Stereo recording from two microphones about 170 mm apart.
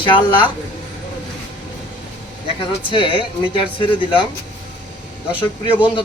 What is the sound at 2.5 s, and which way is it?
Speech, 30° left (ahead or behind).